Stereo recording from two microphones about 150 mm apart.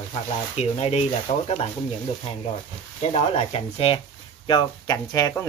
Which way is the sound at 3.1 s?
40° left (ahead or behind).